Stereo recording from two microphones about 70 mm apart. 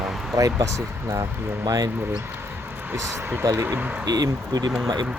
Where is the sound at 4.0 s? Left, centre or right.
Right.